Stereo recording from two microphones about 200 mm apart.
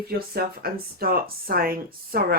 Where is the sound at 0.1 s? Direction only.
50° right (ahead or behind).